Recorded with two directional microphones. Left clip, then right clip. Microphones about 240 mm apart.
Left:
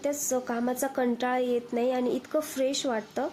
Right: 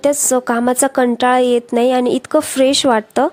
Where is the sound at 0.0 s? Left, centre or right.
Right.